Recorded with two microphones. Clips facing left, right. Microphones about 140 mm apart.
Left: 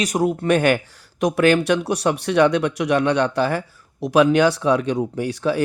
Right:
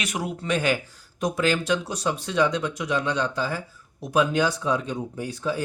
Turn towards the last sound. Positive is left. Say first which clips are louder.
# left 7 dB
turn(degrees=75)  # may be behind; listen again after turning